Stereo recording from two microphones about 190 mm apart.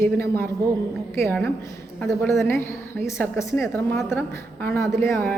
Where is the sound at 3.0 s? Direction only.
15° left (ahead or behind).